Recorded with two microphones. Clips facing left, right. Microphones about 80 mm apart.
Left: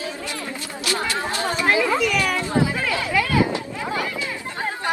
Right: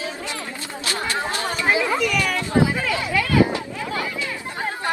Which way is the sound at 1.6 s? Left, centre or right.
Centre.